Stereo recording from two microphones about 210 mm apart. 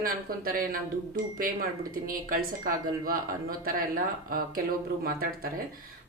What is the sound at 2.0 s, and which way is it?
Speech, 40° right (ahead or behind).